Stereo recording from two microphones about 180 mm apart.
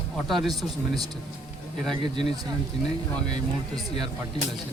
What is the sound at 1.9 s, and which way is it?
Speech, 25° right (ahead or behind).